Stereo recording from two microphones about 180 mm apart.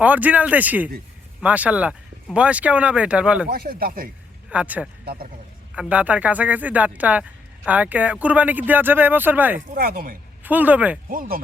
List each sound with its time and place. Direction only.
0.0 s speech: 10° right (ahead or behind)
3.5 s speech: 55° right (ahead or behind)
4.4 s speech: 5° right (ahead or behind)
5.0 s speech: 55° right (ahead or behind)
5.7 s speech: 5° right (ahead or behind)
9.7 s speech: 55° right (ahead or behind)
10.4 s speech: 10° right (ahead or behind)
11.1 s speech: 50° right (ahead or behind)